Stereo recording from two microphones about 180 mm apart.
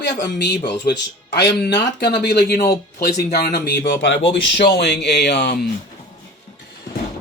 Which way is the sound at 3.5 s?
65° left (ahead or behind).